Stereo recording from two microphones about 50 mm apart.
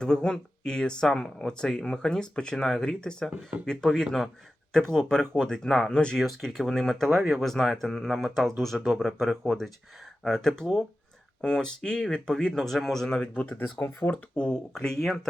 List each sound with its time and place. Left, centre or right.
0.0 s speech: centre
2.6 s speech: centre
3.0 s speech: centre
3.2 s speech: right
3.7 s speech: centre
6.1 s speech: centre
8.0 s speech: centre
8.4 s speech: centre
12.5 s speech: centre
13.2 s speech: left
14.3 s speech: centre